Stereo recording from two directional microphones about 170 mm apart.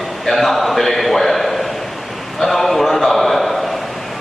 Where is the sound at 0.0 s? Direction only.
Centre (ahead or behind).